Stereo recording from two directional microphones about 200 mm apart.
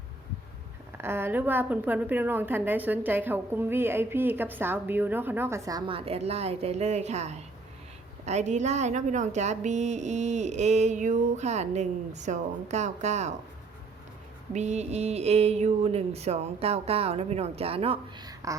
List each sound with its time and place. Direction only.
0.9 s a woman's voice: 10° right (ahead or behind)
6.0 s a woman's voice: 30° right (ahead or behind)
14.5 s a woman's voice: 35° right (ahead or behind); by 18.5 s 20° right (ahead or behind)